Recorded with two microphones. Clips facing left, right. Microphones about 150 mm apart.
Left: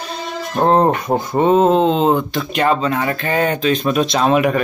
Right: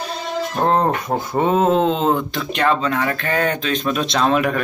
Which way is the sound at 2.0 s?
20° left (ahead or behind).